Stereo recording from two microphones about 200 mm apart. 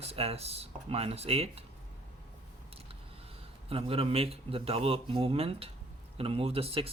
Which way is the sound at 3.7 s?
30° right (ahead or behind).